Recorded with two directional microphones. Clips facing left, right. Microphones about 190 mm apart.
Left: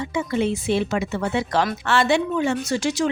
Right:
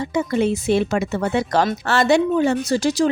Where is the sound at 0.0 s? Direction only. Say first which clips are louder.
Right 3 dB; 40° right (ahead or behind).